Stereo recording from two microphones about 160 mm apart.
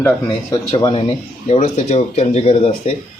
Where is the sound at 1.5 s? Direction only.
45° left (ahead or behind).